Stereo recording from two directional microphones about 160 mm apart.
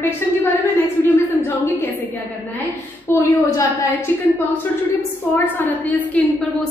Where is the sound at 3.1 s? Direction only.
20° left (ahead or behind).